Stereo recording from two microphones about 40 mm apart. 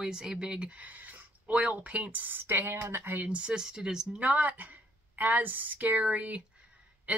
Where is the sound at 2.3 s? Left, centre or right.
Right.